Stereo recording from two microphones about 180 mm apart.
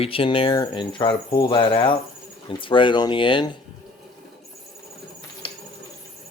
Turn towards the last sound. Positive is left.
turn(degrees=30)  # may be behind; listen again after turning